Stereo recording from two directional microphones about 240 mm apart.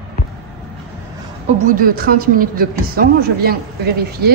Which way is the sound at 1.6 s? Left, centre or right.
Right.